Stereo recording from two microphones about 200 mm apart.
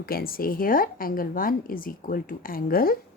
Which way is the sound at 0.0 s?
50° left (ahead or behind).